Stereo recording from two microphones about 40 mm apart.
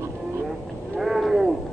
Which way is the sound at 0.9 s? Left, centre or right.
Centre.